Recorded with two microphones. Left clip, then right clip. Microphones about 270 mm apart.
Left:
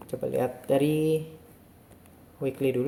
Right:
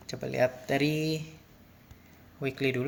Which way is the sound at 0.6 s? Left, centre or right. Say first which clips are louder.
Left 5 dB; centre.